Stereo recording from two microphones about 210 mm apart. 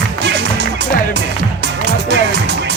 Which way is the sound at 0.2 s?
55° right (ahead or behind).